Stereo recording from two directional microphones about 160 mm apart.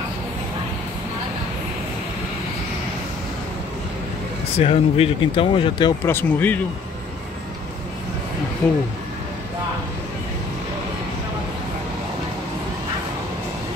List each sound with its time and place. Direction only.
4.6 s speech: 35° left (ahead or behind)
6.0 s speech: 10° left (ahead or behind)
8.6 s speech: 20° left (ahead or behind)